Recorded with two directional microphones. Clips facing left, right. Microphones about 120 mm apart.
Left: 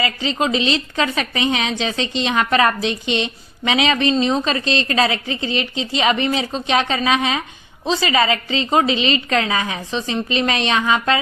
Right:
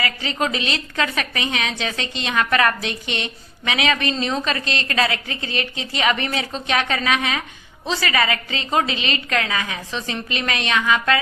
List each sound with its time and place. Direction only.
0.0 s a woman's voice: 25° left (ahead or behind)